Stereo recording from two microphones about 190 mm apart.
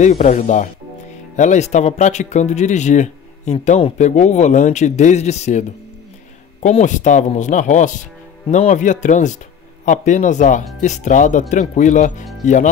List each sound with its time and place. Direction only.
0.2 s speech: 40° left (ahead or behind)